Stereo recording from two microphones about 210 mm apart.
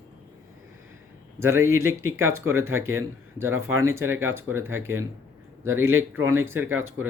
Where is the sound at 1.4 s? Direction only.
10° right (ahead or behind).